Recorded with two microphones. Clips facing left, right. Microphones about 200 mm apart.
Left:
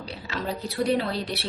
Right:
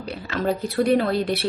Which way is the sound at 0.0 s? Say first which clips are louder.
Right 7 dB; 50° right (ahead or behind).